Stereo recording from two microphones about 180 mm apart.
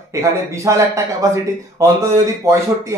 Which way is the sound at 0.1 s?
15° right (ahead or behind).